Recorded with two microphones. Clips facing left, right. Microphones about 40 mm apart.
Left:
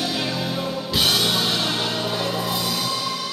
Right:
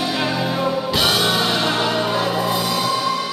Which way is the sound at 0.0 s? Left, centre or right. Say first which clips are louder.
Right 4 dB; centre.